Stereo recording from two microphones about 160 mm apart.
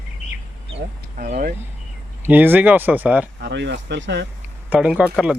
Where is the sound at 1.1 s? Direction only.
60° right (ahead or behind).